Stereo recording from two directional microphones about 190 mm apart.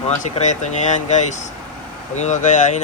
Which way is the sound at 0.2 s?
40° left (ahead or behind).